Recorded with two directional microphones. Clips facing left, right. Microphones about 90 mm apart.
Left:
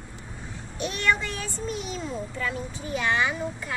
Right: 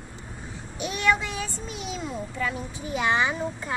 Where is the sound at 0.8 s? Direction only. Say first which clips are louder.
Right 1 dB; 10° right (ahead or behind).